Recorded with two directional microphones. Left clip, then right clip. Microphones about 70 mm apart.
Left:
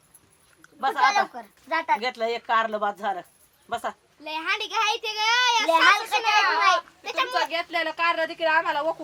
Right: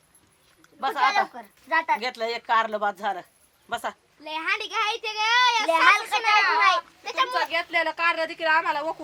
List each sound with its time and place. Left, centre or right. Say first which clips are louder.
0.8 s speech: left 1 dB; centre
1.2 s a child's voice: left 1 dB; centre
2.0 s a woman's voice: left 2 dB; centre
4.2 s a child's voice: even; centre